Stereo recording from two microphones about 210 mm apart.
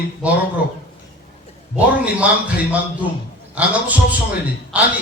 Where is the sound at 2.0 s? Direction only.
5° right (ahead or behind).